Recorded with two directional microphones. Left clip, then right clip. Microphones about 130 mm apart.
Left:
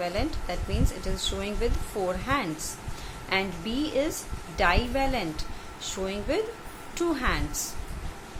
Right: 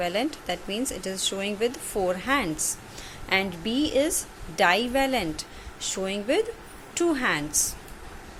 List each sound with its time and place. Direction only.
0.0 s speech: 50° right (ahead or behind)